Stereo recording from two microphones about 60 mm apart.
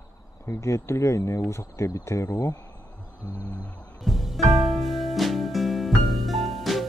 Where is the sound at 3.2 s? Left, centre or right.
Right.